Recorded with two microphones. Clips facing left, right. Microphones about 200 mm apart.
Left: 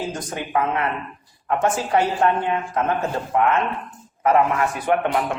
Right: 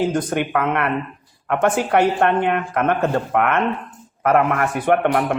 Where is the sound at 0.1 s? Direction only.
60° right (ahead or behind).